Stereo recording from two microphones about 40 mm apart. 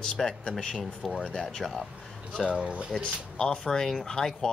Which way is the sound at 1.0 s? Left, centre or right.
Centre.